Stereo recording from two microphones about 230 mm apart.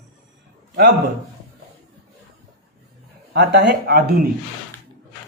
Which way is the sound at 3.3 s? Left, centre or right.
Right.